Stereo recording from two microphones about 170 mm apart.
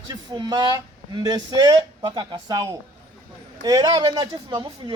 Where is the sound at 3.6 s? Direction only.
25° right (ahead or behind).